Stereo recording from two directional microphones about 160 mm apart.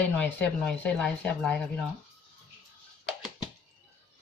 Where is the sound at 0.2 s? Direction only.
10° left (ahead or behind).